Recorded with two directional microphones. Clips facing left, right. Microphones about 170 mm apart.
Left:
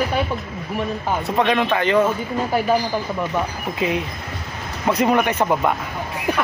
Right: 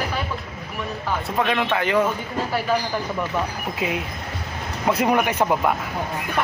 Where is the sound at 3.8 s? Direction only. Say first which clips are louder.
Left 5 dB; 5° right (ahead or behind).